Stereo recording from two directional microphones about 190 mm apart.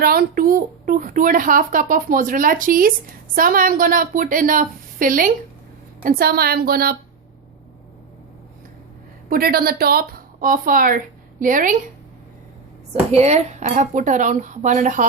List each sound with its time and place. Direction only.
0.0 s a child's voice: 50° right (ahead or behind)
9.3 s a woman's voice: 50° right (ahead or behind)
12.9 s speech: 35° right (ahead or behind)